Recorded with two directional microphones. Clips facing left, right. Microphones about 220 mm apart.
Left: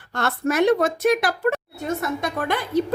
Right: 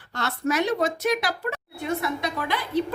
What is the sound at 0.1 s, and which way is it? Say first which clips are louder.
A woman's voice: left 3 dB; 50° left (ahead or behind).